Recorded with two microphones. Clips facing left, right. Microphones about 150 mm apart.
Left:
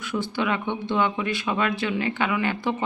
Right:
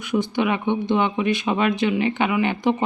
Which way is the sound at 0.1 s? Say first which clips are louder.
Right 5 dB; 15° right (ahead or behind).